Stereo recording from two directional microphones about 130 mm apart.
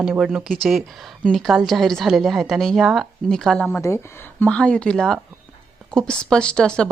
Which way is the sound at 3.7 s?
20° left (ahead or behind).